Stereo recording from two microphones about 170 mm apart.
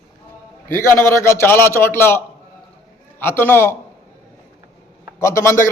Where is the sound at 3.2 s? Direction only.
15° left (ahead or behind).